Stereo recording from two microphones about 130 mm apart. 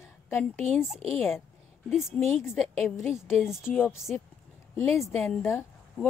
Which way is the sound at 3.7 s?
10° left (ahead or behind).